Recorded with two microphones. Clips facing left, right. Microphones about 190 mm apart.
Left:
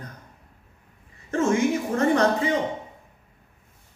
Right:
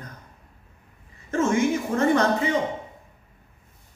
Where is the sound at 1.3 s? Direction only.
35° left (ahead or behind).